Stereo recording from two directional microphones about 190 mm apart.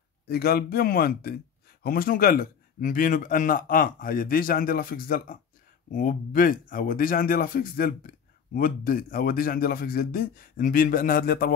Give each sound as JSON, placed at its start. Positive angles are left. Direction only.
{"t": 0.3, "sound": "speech", "side_deg": 55}